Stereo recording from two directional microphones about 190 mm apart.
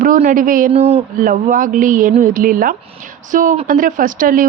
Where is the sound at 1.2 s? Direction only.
45° right (ahead or behind).